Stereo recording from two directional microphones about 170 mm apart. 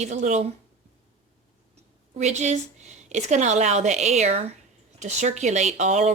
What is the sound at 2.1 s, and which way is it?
Speech, 40° right (ahead or behind).